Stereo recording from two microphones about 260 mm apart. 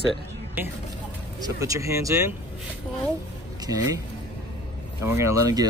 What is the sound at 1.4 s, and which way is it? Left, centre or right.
Speech, centre.